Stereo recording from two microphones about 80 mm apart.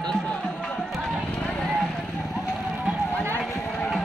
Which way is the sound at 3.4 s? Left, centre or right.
Centre.